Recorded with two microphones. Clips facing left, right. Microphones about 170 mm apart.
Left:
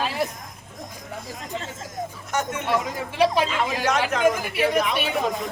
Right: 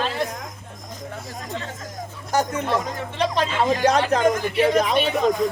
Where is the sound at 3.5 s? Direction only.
35° right (ahead or behind).